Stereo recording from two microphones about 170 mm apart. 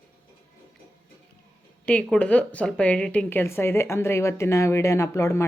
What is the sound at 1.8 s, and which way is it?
Speech, 5° left (ahead or behind).